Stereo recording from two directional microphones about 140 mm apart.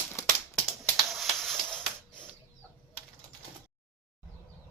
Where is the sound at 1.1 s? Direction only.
Centre (ahead or behind).